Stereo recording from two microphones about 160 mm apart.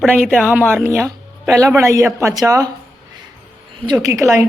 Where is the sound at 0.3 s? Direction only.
10° right (ahead or behind).